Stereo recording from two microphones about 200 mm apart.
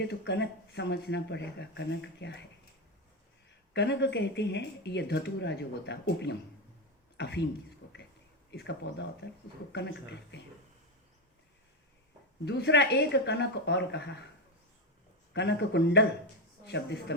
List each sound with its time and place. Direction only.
0.0 s speech: 60° left (ahead or behind)
3.7 s speech: 60° left (ahead or behind)
7.8 s a sound: 55° left (ahead or behind)
8.4 s speech: 60° left (ahead or behind)
12.5 s speech: 60° left (ahead or behind)
15.3 s speech: 60° left (ahead or behind)